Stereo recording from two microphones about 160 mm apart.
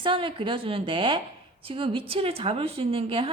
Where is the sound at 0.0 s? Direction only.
35° right (ahead or behind).